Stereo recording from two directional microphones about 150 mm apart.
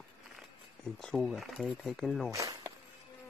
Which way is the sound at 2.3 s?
25° right (ahead or behind).